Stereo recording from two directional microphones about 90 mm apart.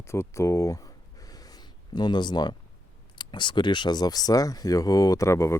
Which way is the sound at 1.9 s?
55° left (ahead or behind).